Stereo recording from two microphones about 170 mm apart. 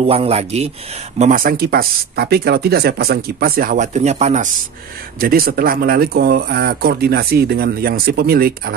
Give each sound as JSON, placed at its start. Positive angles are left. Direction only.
{"t": 0.0, "sound": "speech", "side_deg": -35}
{"t": 5.2, "sound": "speech", "side_deg": -60}